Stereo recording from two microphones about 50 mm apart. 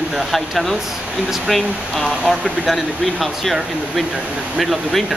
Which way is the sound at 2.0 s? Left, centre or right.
Centre.